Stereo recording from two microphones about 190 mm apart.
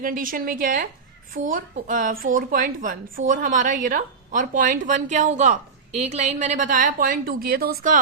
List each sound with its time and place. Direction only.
0.0 s a woman's voice: 45° right (ahead or behind)